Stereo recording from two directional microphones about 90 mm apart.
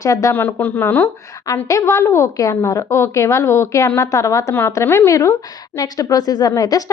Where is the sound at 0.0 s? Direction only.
35° left (ahead or behind).